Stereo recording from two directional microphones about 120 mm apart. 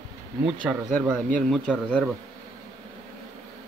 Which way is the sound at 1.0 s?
5° left (ahead or behind).